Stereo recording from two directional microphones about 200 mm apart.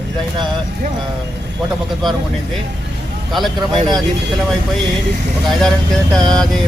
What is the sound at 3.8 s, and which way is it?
Speech, 20° right (ahead or behind).